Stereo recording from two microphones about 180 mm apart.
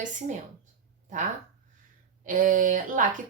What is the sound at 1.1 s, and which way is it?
Speech, 45° right (ahead or behind).